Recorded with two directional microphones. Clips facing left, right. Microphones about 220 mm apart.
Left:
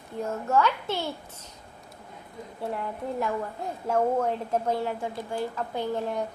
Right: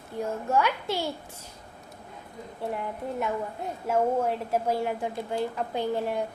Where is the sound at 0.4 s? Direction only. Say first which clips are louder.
Left 2 dB; 10° right (ahead or behind).